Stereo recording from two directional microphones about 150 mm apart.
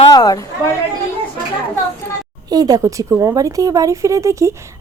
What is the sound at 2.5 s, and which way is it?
Speech, 25° right (ahead or behind).